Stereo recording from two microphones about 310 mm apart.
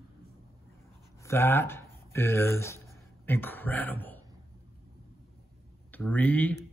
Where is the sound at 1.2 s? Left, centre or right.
Centre.